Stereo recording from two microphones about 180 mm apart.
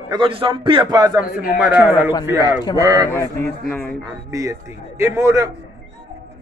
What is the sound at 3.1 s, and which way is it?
Speech, 15° left (ahead or behind).